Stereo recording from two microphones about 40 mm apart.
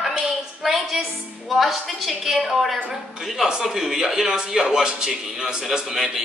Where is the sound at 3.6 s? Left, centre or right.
Centre.